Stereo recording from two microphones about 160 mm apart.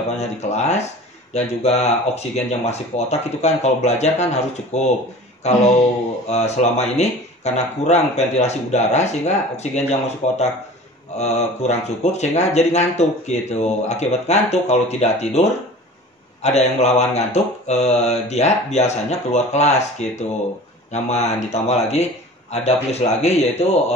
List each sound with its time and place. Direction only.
0.2 s speech: 45° left (ahead or behind)